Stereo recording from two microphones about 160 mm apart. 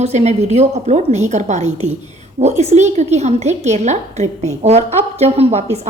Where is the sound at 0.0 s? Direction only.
45° right (ahead or behind).